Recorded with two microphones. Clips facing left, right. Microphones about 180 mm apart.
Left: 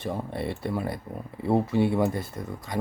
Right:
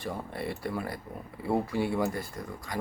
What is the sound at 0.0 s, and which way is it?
Speech, 25° left (ahead or behind).